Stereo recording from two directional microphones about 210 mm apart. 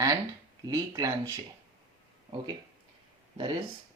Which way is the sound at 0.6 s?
15° right (ahead or behind).